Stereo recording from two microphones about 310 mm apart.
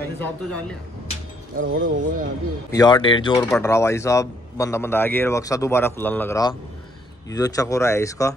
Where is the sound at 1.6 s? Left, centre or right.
Right.